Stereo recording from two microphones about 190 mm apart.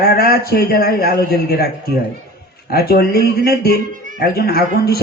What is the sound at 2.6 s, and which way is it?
Speech, 55° left (ahead or behind).